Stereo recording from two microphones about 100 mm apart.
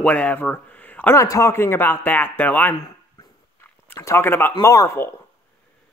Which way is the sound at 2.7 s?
40° left (ahead or behind).